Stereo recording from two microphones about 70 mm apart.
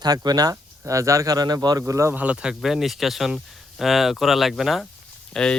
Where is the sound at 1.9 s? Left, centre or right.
Right.